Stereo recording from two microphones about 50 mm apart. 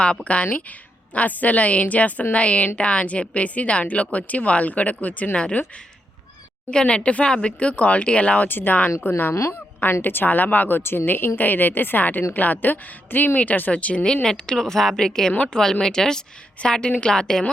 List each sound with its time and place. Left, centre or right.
0.3 s speech: left
8.4 s a woman's voice: left
9.3 s a woman's voice: left
10.0 s a woman's voice: left
14.0 s a woman's voice: centre